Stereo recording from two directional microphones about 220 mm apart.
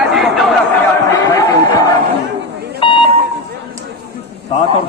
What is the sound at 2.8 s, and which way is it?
Beep, 20° left (ahead or behind).